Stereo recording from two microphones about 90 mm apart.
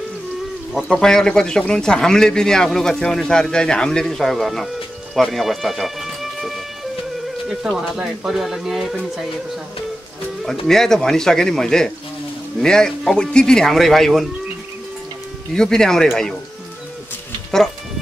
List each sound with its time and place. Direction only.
0.7 s speech: 5° left (ahead or behind)
10.4 s speech: centre (ahead or behind)
15.5 s speech: 5° left (ahead or behind)